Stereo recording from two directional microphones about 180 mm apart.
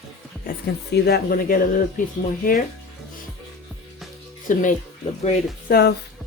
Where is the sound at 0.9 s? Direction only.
60° left (ahead or behind).